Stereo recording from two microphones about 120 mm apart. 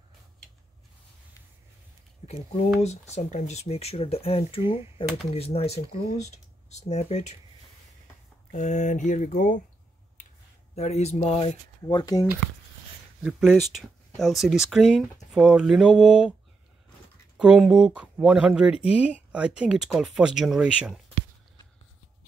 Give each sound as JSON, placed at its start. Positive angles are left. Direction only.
{"t": 2.2, "sound": "speech", "side_deg": 70}
{"t": 8.5, "sound": "speech", "side_deg": 90}
{"t": 10.8, "sound": "speech", "side_deg": 65}
{"t": 11.8, "sound": "speech", "side_deg": 35}
{"t": 13.2, "sound": "speech", "side_deg": -5}
{"t": 17.4, "sound": "speech", "side_deg": -5}